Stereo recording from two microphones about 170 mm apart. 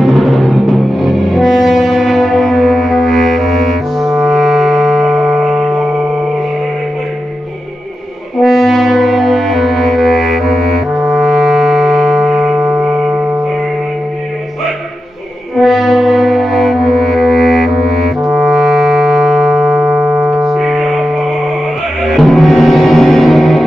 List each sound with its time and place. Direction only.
0.0 s music: centre (ahead or behind)
8.4 s brass instrument: centre (ahead or behind)
11.1 s music: centre (ahead or behind)
12.5 s music: 15° right (ahead or behind)
15.5 s music: centre (ahead or behind)
20.0 s music: 15° right (ahead or behind)
20.4 s music: centre (ahead or behind)
22.0 s gong: centre (ahead or behind)